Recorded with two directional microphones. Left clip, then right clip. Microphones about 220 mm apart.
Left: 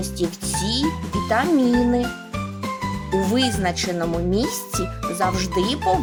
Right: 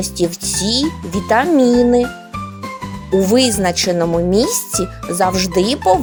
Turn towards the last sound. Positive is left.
turn(degrees=-35)  # may be behind; listen again after turning